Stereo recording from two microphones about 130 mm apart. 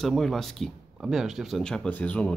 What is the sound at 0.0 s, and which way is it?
Speech, centre (ahead or behind).